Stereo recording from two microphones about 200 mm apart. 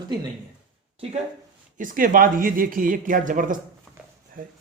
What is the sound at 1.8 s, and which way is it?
Speech, 45° right (ahead or behind).